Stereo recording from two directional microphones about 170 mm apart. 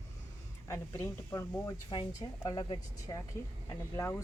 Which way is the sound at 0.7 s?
15° left (ahead or behind).